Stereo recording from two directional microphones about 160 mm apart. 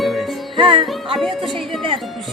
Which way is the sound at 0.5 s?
35° right (ahead or behind).